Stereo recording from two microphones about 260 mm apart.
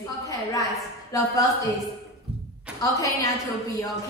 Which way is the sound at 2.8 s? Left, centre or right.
Centre.